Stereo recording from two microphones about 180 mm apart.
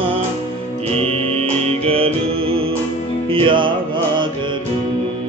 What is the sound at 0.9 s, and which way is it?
Music, 35° right (ahead or behind).